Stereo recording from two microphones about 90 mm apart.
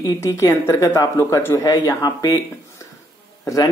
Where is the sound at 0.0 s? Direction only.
40° left (ahead or behind).